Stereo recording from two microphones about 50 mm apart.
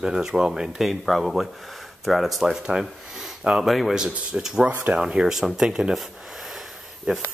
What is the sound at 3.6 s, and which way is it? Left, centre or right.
Speech, centre.